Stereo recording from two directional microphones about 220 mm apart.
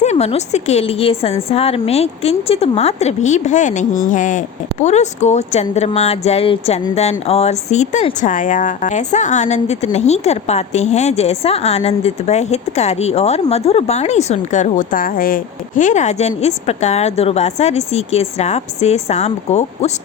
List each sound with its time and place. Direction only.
0.0 s a woman's voice: 30° left (ahead or behind)